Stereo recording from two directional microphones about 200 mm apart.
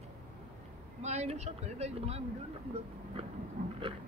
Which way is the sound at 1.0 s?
35° right (ahead or behind).